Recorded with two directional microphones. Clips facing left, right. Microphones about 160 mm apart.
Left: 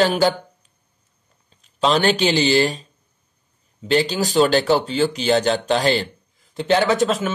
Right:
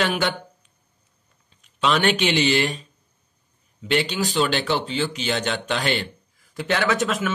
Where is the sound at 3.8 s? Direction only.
35° left (ahead or behind).